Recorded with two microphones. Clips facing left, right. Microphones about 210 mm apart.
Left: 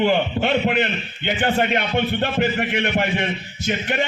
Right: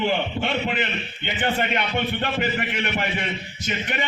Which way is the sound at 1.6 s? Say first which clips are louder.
Left 4 dB; 50° left (ahead or behind).